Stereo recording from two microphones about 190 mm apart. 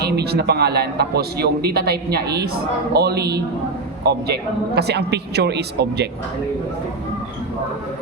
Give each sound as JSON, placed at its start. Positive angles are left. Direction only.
{"t": 0.0, "sound": "a man's voice", "side_deg": -60}